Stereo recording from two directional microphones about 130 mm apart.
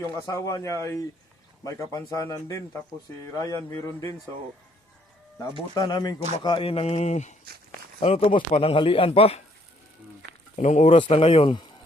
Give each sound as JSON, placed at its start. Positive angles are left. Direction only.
{"t": 0.3, "sound": "a man's voice", "side_deg": 25}
{"t": 5.7, "sound": "speech", "side_deg": 30}
{"t": 8.0, "sound": "speech", "side_deg": 45}
{"t": 10.6, "sound": "speech", "side_deg": 60}
{"t": 10.9, "sound": "speech", "side_deg": 45}